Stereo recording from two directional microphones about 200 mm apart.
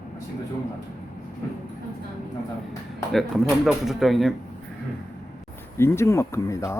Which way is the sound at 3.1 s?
Centre (ahead or behind).